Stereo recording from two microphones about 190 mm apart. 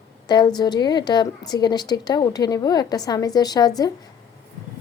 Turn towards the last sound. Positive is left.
turn(degrees=20)  # may be behind; listen again after turning